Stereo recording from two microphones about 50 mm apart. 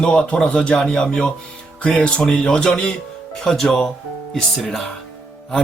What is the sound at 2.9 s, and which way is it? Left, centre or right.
A man's voice, centre.